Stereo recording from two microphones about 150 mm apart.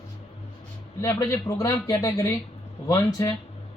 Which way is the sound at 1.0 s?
20° left (ahead or behind).